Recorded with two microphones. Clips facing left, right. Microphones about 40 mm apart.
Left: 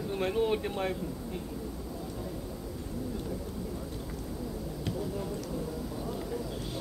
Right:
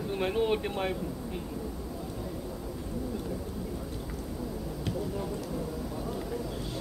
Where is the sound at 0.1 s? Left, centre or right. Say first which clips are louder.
Right 1 dB; centre.